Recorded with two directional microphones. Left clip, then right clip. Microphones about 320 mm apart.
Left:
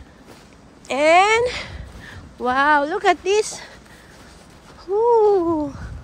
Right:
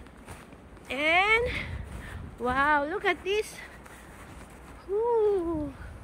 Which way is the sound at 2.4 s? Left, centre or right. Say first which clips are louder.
Left 8 dB; centre.